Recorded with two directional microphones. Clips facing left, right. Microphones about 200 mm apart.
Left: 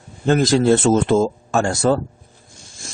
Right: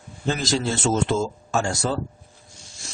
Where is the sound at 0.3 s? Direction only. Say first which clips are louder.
Left 10 dB; 55° left (ahead or behind).